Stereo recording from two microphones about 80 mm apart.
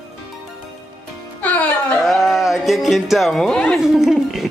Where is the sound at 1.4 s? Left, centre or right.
Centre.